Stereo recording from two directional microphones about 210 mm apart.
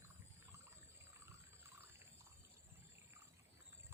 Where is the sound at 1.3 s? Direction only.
10° right (ahead or behind).